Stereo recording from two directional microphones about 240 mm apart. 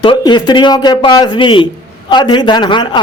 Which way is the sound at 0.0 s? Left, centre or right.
Centre.